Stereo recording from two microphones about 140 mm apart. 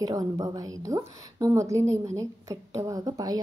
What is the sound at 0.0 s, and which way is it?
A woman's voice, 25° right (ahead or behind).